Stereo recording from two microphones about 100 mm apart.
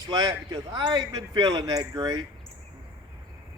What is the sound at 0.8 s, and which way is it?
Speech, 50° right (ahead or behind).